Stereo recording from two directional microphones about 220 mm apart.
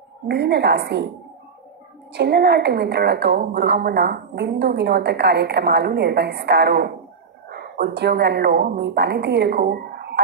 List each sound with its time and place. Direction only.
0.3 s a woman's voice: 50° right (ahead or behind)
2.1 s a woman's voice: 50° right (ahead or behind)